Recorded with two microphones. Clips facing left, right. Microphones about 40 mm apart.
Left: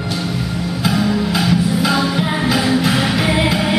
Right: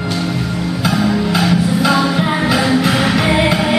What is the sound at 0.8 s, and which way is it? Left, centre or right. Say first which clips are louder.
Music: right 1 dB; centre.